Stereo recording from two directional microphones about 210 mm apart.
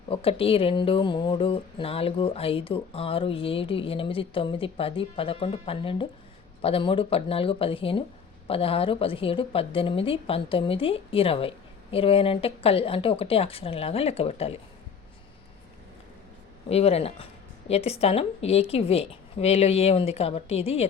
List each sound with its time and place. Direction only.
0.1 s a woman's voice: 25° left (ahead or behind)
16.6 s a woman's voice: 30° left (ahead or behind)